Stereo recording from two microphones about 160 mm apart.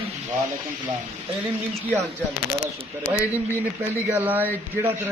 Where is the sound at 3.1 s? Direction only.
15° right (ahead or behind).